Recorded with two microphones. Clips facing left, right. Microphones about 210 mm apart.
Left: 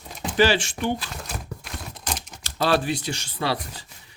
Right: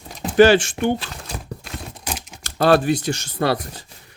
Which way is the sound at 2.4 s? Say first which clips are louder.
Right 6 dB; 50° right (ahead or behind).